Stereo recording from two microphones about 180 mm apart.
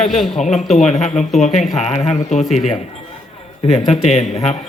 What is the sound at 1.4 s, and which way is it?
Speech, 40° left (ahead or behind).